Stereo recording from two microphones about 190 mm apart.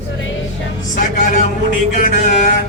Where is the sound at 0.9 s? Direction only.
40° left (ahead or behind).